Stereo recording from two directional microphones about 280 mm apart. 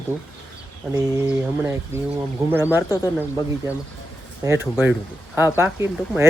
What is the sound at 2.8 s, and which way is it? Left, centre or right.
Speech, centre.